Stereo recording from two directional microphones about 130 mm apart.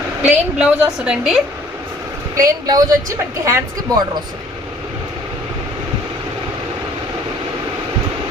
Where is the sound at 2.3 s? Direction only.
25° right (ahead or behind).